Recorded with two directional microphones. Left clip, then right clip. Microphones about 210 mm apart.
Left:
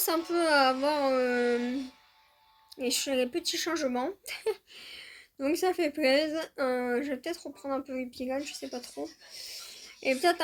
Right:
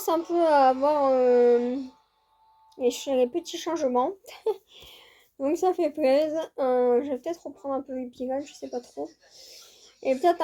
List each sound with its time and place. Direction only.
0.0 s speech: 20° left (ahead or behind)
2.7 s speech: 20° left (ahead or behind)
9.4 s a sound: 20° left (ahead or behind)